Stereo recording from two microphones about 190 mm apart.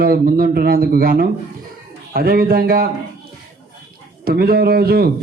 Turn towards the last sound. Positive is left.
turn(degrees=-55)  # may be behind; listen again after turning